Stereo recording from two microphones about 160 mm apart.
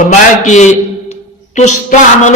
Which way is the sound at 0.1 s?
50° left (ahead or behind).